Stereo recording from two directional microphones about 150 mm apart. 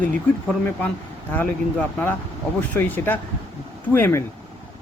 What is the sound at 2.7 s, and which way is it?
Speech, 10° left (ahead or behind).